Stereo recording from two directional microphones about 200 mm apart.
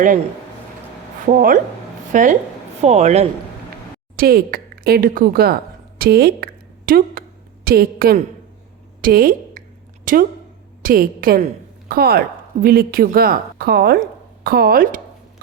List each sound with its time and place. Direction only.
1.3 s a man's voice: 40° right (ahead or behind)
4.2 s speech: 45° right (ahead or behind)
6.0 s a sound: 50° right (ahead or behind)
10.1 s a woman's voice: 40° right (ahead or behind)